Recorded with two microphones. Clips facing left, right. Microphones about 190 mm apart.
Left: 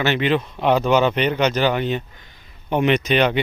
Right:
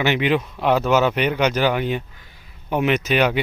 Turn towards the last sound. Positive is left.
turn(degrees=-5)  # may be behind; listen again after turning